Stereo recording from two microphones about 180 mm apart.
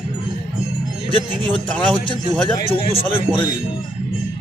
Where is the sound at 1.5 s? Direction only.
5° left (ahead or behind).